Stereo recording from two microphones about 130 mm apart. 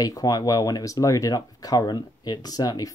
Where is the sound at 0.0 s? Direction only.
30° left (ahead or behind).